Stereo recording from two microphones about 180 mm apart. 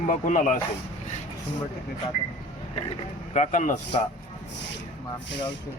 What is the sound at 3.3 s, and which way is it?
Speech, 40° left (ahead or behind).